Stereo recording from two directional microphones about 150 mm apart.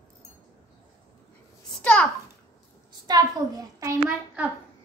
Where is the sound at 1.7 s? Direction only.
5° left (ahead or behind).